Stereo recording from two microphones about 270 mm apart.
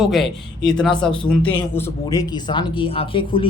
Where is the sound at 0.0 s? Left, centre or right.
Centre.